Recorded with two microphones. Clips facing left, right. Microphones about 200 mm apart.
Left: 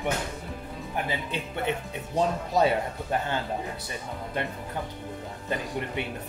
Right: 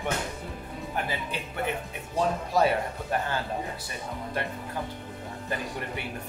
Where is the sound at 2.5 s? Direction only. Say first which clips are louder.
Left 1 dB; 20° left (ahead or behind).